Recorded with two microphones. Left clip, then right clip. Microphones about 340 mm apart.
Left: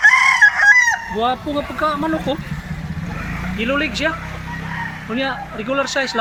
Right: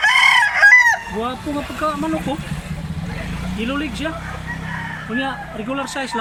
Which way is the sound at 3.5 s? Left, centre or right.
Centre.